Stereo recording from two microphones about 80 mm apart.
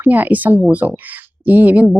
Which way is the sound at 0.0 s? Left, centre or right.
Right.